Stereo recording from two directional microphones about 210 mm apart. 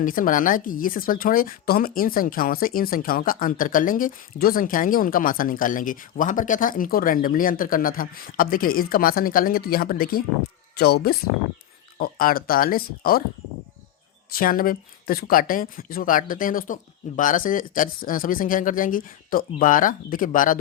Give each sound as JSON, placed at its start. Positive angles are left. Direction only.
{"t": 0.0, "sound": "speech", "side_deg": 40}
{"t": 14.3, "sound": "speech", "side_deg": 45}